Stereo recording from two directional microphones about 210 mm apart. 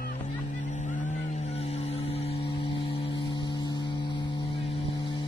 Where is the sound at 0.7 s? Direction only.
35° left (ahead or behind).